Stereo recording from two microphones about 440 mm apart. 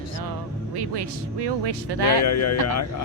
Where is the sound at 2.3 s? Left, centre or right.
Left.